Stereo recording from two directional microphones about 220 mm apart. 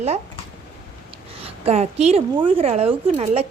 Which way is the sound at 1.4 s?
30° right (ahead or behind).